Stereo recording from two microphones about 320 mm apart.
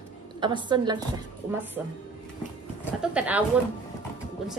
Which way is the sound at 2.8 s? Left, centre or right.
Centre.